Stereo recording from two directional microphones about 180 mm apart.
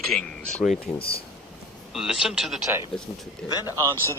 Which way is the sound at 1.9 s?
5° right (ahead or behind).